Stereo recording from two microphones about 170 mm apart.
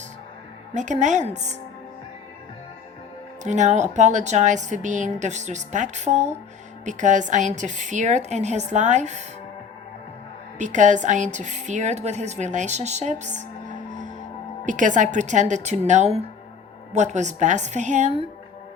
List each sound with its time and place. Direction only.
0.7 s a woman's voice: 45° right (ahead or behind)
3.4 s a woman's voice: 45° right (ahead or behind)
10.6 s a woman's voice: 45° right (ahead or behind)